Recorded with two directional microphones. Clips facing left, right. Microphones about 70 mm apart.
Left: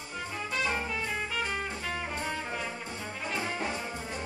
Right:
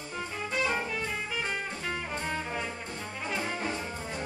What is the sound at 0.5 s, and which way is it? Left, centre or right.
Music, centre.